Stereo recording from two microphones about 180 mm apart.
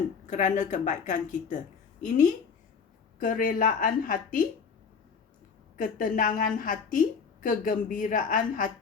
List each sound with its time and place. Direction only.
0.3 s a woman's voice: 40° left (ahead or behind)
5.7 s a woman's voice: 50° left (ahead or behind)